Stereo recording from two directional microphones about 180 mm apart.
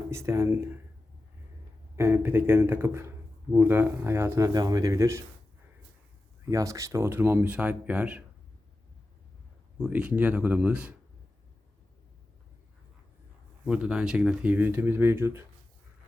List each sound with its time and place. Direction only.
0.1 s speech: 15° right (ahead or behind)
2.0 s speech: 15° right (ahead or behind)
6.5 s speech: 20° right (ahead or behind)
9.7 s speech: 5° right (ahead or behind)
13.7 s speech: 5° right (ahead or behind)